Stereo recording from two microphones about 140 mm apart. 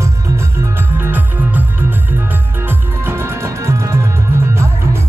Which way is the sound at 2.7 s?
15° right (ahead or behind).